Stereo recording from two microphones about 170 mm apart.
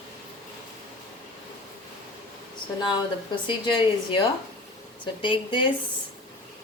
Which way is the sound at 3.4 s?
30° left (ahead or behind).